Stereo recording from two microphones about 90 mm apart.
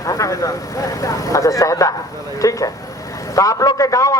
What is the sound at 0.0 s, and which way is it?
A man's voice, 40° left (ahead or behind).